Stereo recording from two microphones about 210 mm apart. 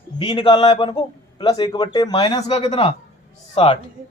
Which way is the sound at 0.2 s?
20° left (ahead or behind).